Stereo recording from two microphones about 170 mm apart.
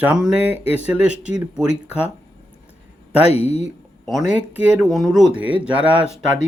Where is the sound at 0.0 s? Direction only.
5° right (ahead or behind).